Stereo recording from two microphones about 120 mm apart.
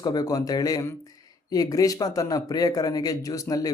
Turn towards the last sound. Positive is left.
turn(degrees=30)  # may be behind; listen again after turning